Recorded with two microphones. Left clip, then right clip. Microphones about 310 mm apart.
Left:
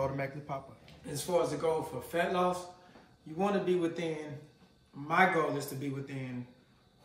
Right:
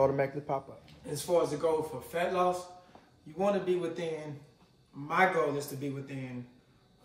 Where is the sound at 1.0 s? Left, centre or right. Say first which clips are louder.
Right 2 dB; centre.